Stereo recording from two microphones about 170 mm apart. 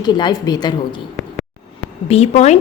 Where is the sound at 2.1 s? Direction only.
40° left (ahead or behind).